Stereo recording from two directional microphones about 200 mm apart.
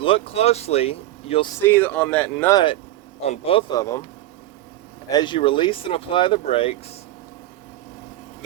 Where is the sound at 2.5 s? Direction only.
25° left (ahead or behind).